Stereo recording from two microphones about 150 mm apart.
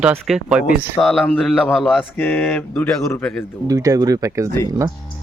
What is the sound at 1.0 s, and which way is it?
Speech, centre (ahead or behind).